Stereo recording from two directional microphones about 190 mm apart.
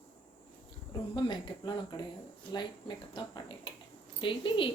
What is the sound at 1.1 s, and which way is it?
Speech, 25° left (ahead or behind).